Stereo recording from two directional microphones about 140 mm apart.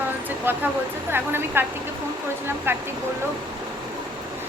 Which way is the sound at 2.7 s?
15° right (ahead or behind).